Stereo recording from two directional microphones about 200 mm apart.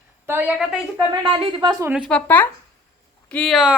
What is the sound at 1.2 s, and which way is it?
Speech, 25° right (ahead or behind).